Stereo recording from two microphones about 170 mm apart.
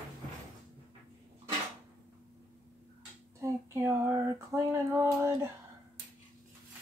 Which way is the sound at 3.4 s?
15° right (ahead or behind).